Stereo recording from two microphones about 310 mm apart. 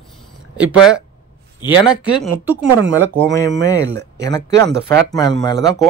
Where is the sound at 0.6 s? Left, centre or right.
Centre.